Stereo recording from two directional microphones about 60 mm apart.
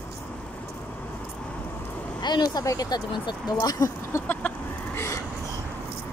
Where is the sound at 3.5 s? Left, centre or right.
Left.